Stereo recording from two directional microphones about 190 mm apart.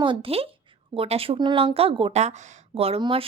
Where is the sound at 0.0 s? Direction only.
25° right (ahead or behind).